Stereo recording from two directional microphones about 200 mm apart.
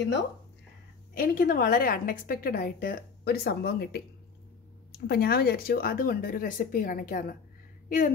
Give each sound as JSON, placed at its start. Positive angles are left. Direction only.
{"t": 1.1, "sound": "a woman's voice", "side_deg": 45}